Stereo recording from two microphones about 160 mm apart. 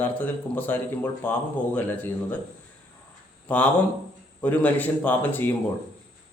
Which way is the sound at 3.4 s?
10° left (ahead or behind).